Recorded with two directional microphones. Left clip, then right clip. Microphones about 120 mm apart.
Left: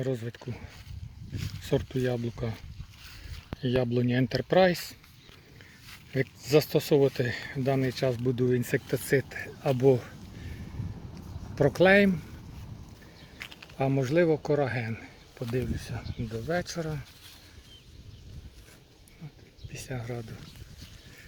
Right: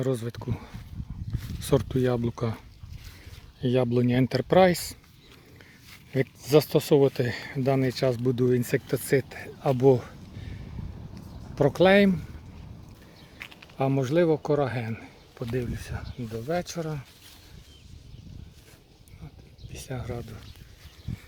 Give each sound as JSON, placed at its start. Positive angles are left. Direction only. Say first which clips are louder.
{"t": 0.0, "sound": "speech", "louder": "right 4 dB", "side_deg": -40}
{"t": 3.6, "sound": "speech", "louder": "right 3 dB", "side_deg": -40}
{"t": 6.1, "sound": "speech", "louder": "right 3 dB", "side_deg": -35}
{"t": 11.5, "sound": "speech", "louder": "right 1 dB", "side_deg": -25}
{"t": 13.4, "sound": "a sound", "louder": "even", "side_deg": -10}
{"t": 13.8, "sound": "speech", "louder": "right 2 dB", "side_deg": -25}
{"t": 15.5, "sound": "speech", "louder": "even", "side_deg": -15}
{"t": 16.6, "sound": "speech", "louder": "right 1 dB", "side_deg": -25}
{"t": 19.7, "sound": "speech", "louder": "right 1 dB", "side_deg": -30}